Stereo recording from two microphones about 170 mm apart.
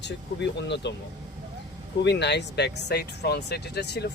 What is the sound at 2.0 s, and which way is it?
Speech, 90° left.